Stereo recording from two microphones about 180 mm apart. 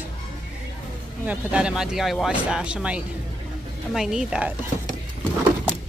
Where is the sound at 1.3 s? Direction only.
5° right (ahead or behind).